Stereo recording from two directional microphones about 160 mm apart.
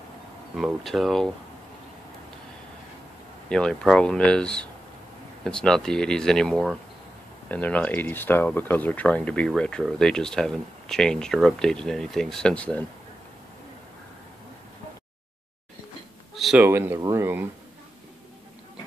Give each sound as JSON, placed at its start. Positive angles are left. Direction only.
{"t": 0.8, "sound": "speech", "side_deg": 0}
{"t": 3.4, "sound": "speech", "side_deg": 5}
{"t": 16.3, "sound": "a sound", "side_deg": 0}
{"t": 16.6, "sound": "speech", "side_deg": -15}